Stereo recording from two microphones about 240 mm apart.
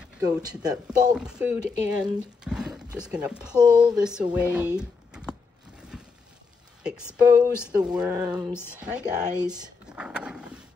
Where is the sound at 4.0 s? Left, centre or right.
Centre.